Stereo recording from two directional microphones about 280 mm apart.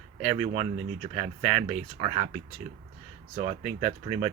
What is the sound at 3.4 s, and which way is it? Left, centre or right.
Speech, right.